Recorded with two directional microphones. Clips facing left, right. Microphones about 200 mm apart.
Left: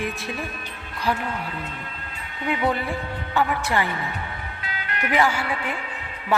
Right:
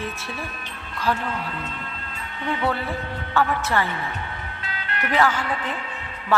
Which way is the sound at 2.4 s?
15° left (ahead or behind).